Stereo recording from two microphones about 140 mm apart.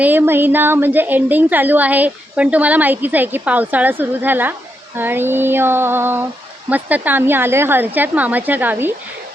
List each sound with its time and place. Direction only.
0.0 s a woman's voice: 15° right (ahead or behind)